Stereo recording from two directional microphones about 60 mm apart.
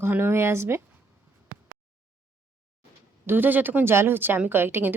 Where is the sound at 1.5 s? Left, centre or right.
Right.